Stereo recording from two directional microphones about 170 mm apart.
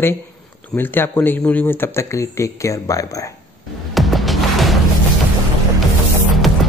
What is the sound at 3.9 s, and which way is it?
Music, centre (ahead or behind).